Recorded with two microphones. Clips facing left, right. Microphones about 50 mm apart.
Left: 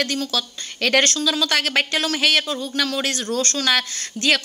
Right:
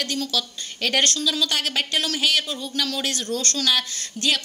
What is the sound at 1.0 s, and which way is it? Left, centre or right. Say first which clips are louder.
Speech: left 2 dB; left.